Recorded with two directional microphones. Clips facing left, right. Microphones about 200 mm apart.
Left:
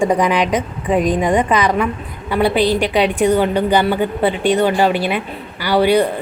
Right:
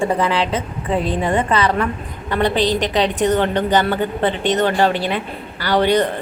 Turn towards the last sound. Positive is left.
turn(degrees=10)  # may be behind; listen again after turning